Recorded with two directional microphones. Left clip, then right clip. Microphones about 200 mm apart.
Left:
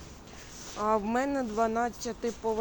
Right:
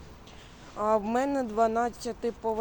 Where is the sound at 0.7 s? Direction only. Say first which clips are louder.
Right 2 dB; 5° right (ahead or behind).